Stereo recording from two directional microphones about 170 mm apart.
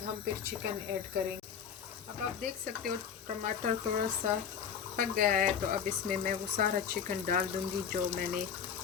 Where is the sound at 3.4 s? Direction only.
50° right (ahead or behind).